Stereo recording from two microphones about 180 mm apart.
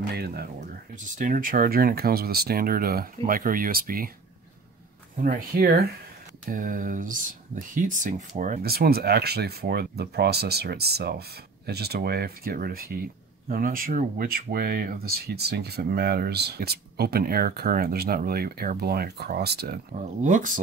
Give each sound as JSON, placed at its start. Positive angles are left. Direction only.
{"t": 0.1, "sound": "speech", "side_deg": -60}
{"t": 0.9, "sound": "speech", "side_deg": -45}
{"t": 5.2, "sound": "speech", "side_deg": -55}
{"t": 20.2, "sound": "speech", "side_deg": -45}